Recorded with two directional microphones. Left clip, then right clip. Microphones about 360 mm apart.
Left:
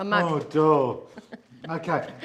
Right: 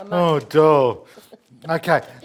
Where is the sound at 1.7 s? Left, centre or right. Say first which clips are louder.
Right 9 dB; right.